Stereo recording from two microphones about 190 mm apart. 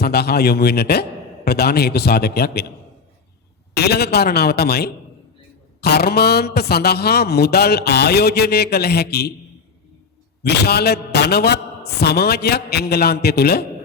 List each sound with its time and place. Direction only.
0.0 s a man's voice: 55° left (ahead or behind)
3.8 s a man's voice: 60° left (ahead or behind)
10.4 s a man's voice: 60° left (ahead or behind)